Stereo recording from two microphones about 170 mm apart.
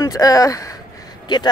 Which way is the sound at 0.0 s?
20° left (ahead or behind).